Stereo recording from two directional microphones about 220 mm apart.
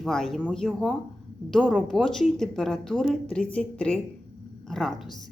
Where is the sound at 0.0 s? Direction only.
Centre (ahead or behind).